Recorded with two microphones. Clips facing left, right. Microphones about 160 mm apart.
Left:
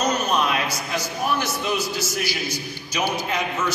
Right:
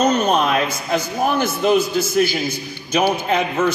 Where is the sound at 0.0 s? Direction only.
55° right (ahead or behind).